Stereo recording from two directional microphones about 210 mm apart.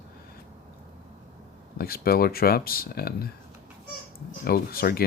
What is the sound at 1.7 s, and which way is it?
Speech, 45° left (ahead or behind).